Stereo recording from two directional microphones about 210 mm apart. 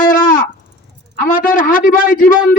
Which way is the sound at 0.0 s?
40° left (ahead or behind).